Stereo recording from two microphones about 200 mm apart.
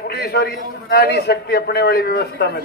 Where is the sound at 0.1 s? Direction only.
55° left (ahead or behind).